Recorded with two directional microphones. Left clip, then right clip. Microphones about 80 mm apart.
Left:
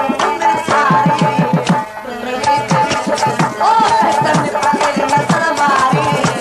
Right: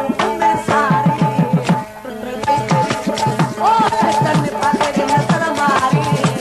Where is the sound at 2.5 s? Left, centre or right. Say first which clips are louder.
Left 1 dB; right.